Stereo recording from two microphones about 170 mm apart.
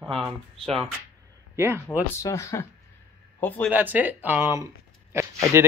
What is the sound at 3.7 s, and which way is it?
Speech, 10° right (ahead or behind).